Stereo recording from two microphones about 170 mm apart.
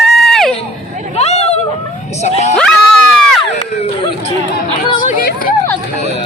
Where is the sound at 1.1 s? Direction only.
40° left (ahead or behind).